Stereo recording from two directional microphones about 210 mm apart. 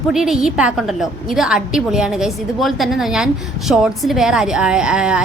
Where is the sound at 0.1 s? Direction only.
Centre (ahead or behind).